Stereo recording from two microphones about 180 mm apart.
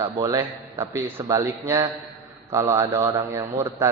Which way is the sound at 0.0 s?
20° right (ahead or behind).